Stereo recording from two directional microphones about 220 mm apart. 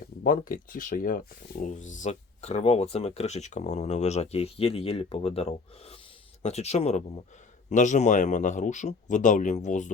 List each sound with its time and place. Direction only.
0.2 s speech: 40° left (ahead or behind)